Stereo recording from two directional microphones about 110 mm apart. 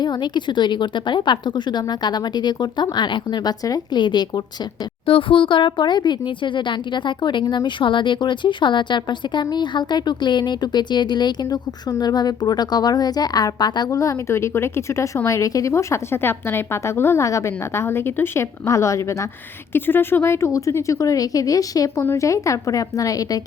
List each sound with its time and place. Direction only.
0.0 s a woman's voice: 40° left (ahead or behind)
5.0 s a woman's voice: 55° left (ahead or behind); by 23.4 s 30° left (ahead or behind)